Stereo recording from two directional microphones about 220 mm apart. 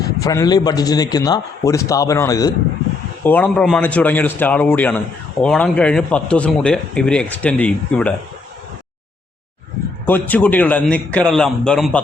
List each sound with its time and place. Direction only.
0.0 s a man's voice: 15° left (ahead or behind)
10.1 s a man's voice: 5° left (ahead or behind)